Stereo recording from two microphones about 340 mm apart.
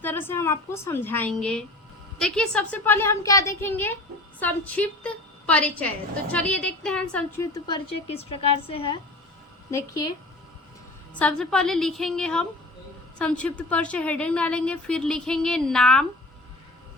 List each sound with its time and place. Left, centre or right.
0.0 s a woman's voice: centre
11.1 s a woman's voice: centre